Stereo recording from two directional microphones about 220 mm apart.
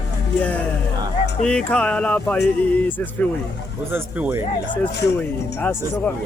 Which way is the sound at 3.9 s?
10° right (ahead or behind).